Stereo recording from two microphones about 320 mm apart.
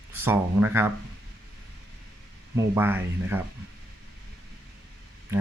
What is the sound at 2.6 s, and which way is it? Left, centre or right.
Speech, centre.